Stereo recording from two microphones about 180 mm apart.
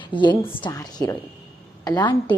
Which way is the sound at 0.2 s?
25° left (ahead or behind).